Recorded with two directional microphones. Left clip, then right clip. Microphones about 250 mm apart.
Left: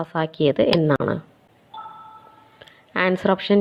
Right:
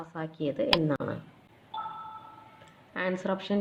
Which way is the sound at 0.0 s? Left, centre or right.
Left.